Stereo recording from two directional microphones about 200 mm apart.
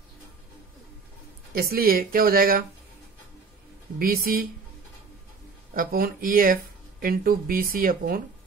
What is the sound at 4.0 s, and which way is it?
Speech, 45° right (ahead or behind).